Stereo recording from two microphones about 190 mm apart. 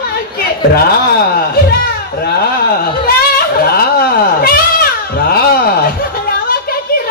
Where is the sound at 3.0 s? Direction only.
50° left (ahead or behind).